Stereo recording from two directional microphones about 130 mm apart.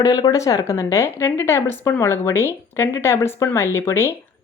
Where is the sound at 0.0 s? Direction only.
30° left (ahead or behind).